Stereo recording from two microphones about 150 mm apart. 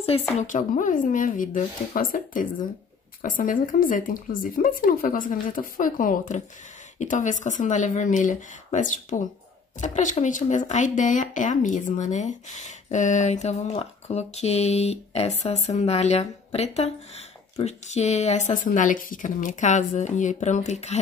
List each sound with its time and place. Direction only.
0.4 s speech: 55° left (ahead or behind)